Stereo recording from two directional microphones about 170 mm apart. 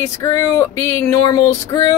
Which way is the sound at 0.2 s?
15° left (ahead or behind).